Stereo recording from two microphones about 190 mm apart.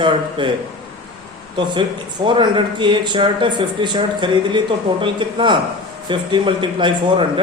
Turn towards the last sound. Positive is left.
turn(degrees=-25)  # may be behind; listen again after turning